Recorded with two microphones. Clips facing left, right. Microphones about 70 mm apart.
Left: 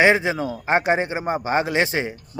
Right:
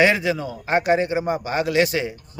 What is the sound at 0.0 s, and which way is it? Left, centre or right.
A man's voice, left.